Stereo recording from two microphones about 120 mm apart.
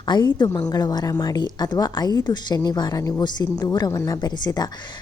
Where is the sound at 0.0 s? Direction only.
40° left (ahead or behind).